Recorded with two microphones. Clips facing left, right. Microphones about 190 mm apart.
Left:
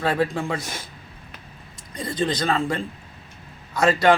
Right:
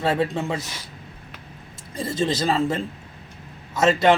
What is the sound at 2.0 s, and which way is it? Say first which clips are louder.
Speech: right 2 dB; 25° right (ahead or behind).